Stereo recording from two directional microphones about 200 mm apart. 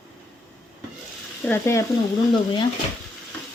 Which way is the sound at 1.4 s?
10° left (ahead or behind).